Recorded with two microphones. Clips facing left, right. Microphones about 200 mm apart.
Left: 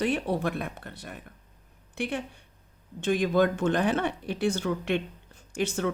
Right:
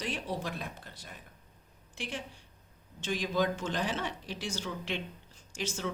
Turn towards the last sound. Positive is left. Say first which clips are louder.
# left 9 dB
turn(degrees=60)  # may be behind; listen again after turning